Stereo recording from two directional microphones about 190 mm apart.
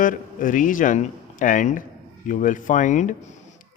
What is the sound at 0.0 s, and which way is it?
Speech, 45° left (ahead or behind).